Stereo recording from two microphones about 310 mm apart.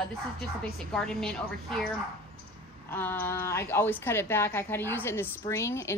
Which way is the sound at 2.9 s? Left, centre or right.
Centre.